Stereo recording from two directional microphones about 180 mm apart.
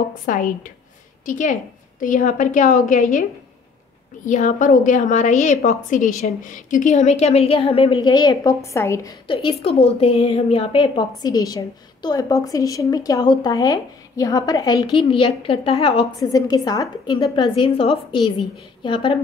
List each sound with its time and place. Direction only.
0.3 s a woman's voice: 50° left (ahead or behind)
16.2 s a woman's voice: 20° left (ahead or behind)